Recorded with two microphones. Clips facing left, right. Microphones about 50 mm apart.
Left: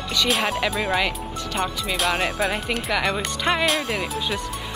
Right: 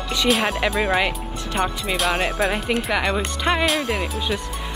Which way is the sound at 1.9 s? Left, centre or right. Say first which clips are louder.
Left 1 dB; centre.